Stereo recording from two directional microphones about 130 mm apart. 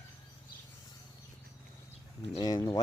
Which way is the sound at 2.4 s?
30° left (ahead or behind).